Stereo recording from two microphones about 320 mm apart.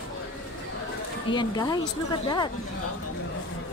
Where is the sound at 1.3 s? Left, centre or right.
Centre.